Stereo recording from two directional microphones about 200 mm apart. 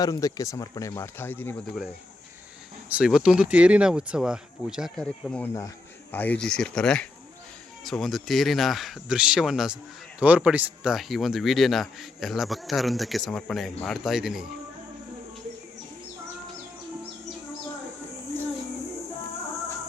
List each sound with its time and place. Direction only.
0.0 s speech: 20° left (ahead or behind)
2.9 s speech: 5° right (ahead or behind)